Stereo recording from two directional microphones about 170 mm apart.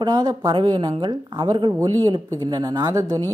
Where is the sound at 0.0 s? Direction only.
25° right (ahead or behind).